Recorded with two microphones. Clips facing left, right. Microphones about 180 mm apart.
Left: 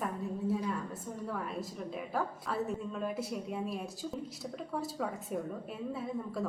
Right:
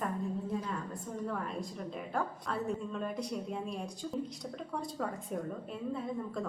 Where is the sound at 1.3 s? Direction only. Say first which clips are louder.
Left 2 dB; 5° left (ahead or behind).